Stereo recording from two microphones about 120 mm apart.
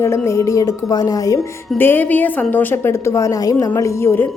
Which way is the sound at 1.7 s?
15° left (ahead or behind).